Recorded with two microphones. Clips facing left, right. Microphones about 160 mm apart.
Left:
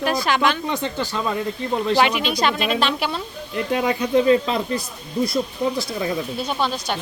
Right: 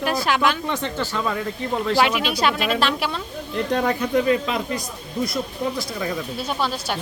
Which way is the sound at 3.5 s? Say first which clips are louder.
Even; 10° left (ahead or behind).